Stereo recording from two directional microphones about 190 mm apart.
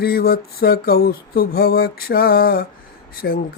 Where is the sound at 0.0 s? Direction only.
55° left (ahead or behind).